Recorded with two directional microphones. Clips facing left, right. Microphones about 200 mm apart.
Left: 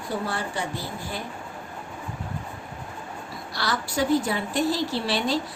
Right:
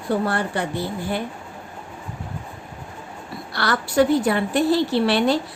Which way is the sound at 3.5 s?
60° right (ahead or behind).